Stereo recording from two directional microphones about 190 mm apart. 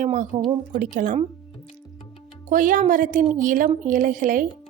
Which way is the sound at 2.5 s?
45° right (ahead or behind).